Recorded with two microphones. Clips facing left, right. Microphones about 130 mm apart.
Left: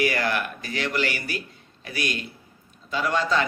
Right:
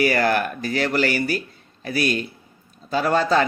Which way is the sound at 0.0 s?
40° right (ahead or behind).